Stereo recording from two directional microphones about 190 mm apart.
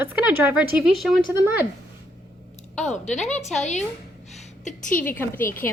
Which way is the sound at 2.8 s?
40° left (ahead or behind).